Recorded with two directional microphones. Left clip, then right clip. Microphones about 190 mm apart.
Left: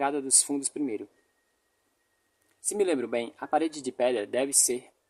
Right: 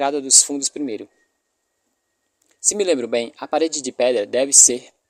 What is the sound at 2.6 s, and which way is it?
Speech, 35° right (ahead or behind).